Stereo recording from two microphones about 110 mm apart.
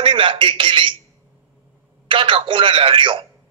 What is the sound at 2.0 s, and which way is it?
A man's voice, 50° right (ahead or behind).